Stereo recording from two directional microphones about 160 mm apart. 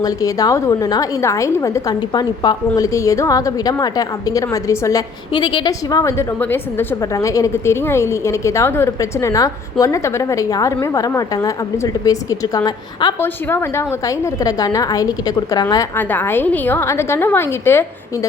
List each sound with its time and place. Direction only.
0.0 s a woman's voice: 20° left (ahead or behind)
13.1 s a woman's voice: 15° left (ahead or behind)